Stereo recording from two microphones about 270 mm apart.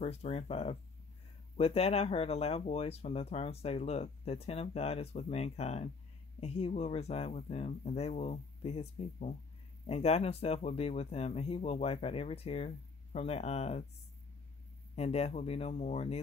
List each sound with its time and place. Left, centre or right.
0.0 s speech: left
15.0 s speech: left